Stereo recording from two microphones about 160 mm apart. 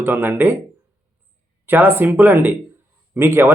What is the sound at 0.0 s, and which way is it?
Speech, 15° right (ahead or behind).